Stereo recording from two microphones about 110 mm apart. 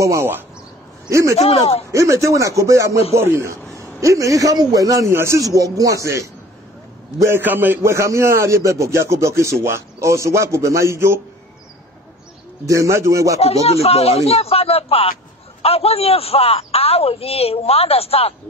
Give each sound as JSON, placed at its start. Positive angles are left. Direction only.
{"t": 0.0, "sound": "a man's voice", "side_deg": -25}
{"t": 1.3, "sound": "a man's voice", "side_deg": 70}
{"t": 1.9, "sound": "a man's voice", "side_deg": -25}
{"t": 12.6, "sound": "a man's voice", "side_deg": -30}
{"t": 13.4, "sound": "a man's voice", "side_deg": 65}